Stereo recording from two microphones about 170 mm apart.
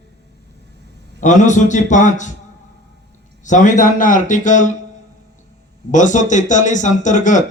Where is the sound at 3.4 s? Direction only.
45° left (ahead or behind).